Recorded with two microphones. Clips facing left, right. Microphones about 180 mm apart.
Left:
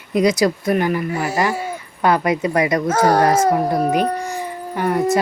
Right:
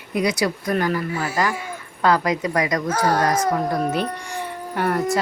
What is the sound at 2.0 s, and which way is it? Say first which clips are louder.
Speech: left 2 dB; 25° left (ahead or behind).